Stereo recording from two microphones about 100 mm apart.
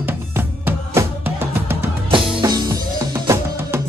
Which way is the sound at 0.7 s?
25° right (ahead or behind).